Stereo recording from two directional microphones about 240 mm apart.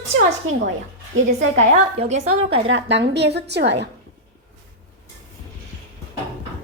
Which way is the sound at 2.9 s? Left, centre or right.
Right.